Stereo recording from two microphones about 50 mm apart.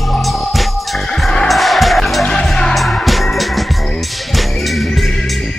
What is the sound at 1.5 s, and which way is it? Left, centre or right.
Music, centre.